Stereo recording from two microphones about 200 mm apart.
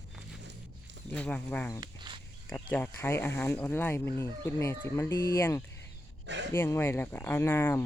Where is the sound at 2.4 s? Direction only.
10° left (ahead or behind).